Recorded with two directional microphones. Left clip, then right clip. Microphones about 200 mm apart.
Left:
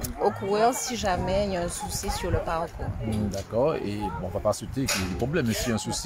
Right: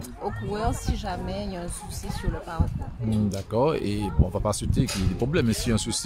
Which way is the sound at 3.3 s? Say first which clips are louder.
Right 1 dB; 45° right (ahead or behind).